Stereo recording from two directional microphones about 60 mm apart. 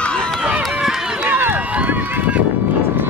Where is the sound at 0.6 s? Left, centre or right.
Centre.